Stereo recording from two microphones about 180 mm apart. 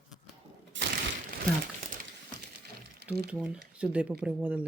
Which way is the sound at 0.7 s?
90° right.